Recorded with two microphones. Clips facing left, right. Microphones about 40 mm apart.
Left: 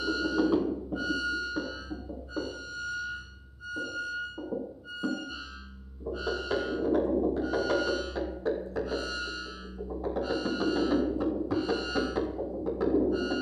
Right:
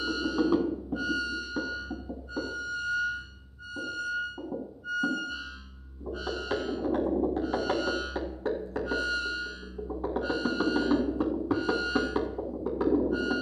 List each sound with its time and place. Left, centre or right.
0.0 s music: centre
3.7 s music: centre
7.4 s music: right
8.2 s music: centre
13.1 s music: centre